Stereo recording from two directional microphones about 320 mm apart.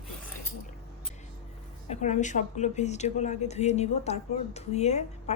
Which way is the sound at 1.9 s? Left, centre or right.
Left.